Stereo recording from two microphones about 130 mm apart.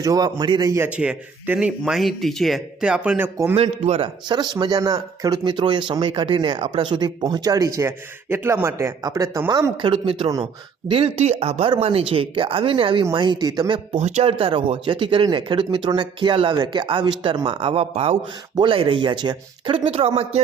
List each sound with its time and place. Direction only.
0.0 s a man's voice: 30° right (ahead or behind)
0.9 s speech: 10° right (ahead or behind)
3.5 s a man's voice: 55° right (ahead or behind)
4.3 s speech: 35° right (ahead or behind)
9.9 s a man's voice: 45° right (ahead or behind)
13.9 s speech: 60° right (ahead or behind)
14.3 s a man's voice: 45° right (ahead or behind)